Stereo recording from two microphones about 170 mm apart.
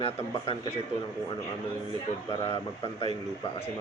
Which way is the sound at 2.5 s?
30° left (ahead or behind).